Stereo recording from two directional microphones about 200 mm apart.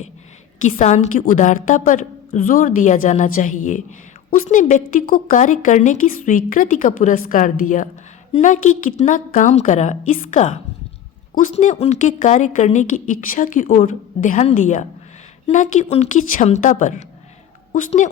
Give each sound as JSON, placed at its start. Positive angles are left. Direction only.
{"t": 0.6, "sound": "a woman's voice", "side_deg": 35}